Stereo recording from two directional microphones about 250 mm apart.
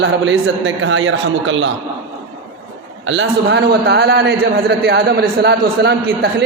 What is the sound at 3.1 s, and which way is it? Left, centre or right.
A man's voice, right.